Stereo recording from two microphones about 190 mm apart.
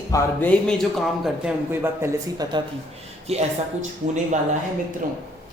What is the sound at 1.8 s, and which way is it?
Speech, 15° right (ahead or behind).